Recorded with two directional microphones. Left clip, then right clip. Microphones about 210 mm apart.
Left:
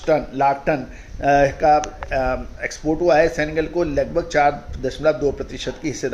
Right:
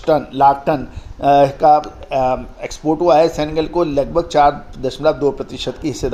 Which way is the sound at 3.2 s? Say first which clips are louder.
Right 3 dB; 5° left (ahead or behind).